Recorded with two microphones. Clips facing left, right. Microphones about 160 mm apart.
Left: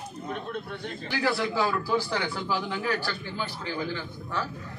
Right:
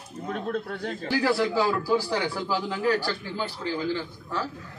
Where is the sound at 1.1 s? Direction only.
35° right (ahead or behind).